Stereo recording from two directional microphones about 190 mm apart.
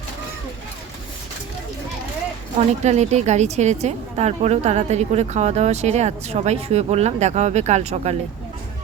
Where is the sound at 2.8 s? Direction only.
35° right (ahead or behind).